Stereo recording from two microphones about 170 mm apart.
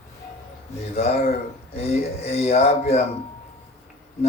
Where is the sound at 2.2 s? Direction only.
35° left (ahead or behind).